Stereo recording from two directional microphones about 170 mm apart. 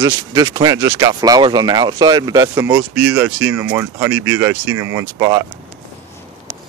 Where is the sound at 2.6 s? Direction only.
5° right (ahead or behind).